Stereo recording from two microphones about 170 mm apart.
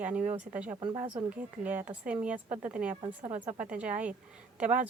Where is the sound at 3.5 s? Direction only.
50° right (ahead or behind).